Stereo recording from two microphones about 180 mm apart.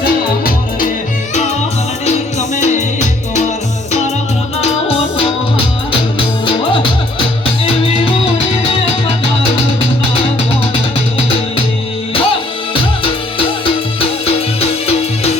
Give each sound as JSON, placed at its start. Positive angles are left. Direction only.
{"t": 0.0, "sound": "music", "side_deg": 55}
{"t": 2.6, "sound": "music", "side_deg": 40}
{"t": 4.6, "sound": "music", "side_deg": 30}
{"t": 12.1, "sound": "music", "side_deg": 30}
{"t": 14.3, "sound": "music", "side_deg": 35}